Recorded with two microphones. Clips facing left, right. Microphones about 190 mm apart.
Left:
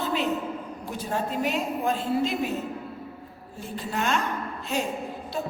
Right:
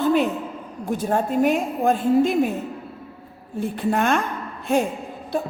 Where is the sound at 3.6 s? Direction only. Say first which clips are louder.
Right 8 dB; 55° right (ahead or behind).